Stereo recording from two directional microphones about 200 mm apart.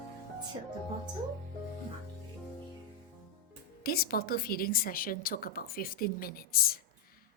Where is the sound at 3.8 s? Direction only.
50° left (ahead or behind).